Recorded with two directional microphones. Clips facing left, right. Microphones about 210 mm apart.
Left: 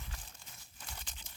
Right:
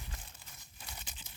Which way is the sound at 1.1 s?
10° right (ahead or behind).